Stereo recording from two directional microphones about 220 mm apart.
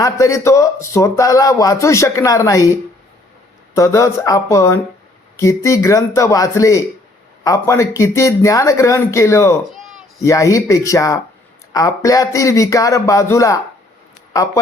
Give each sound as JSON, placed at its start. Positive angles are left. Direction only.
{"t": 0.0, "sound": "speech", "side_deg": 15}
{"t": 3.8, "sound": "speech", "side_deg": 15}
{"t": 9.6, "sound": "a sound", "side_deg": 0}
{"t": 10.2, "sound": "speech", "side_deg": 15}